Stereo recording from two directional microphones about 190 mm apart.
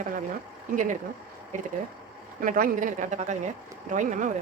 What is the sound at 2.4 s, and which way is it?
Speech, 45° right (ahead or behind).